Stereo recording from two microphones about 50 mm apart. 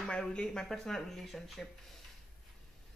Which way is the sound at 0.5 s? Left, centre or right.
Centre.